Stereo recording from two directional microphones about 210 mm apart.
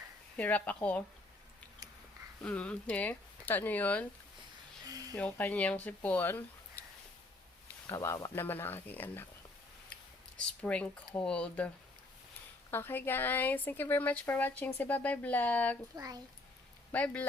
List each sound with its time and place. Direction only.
0.3 s speech: 5° left (ahead or behind)
2.4 s speech: 5° left (ahead or behind)
4.9 s a sound: 15° right (ahead or behind)
5.1 s speech: 10° left (ahead or behind)
7.9 s speech: 15° left (ahead or behind)
12.7 s speech: 10° left (ahead or behind)
16.9 s speech: 5° left (ahead or behind)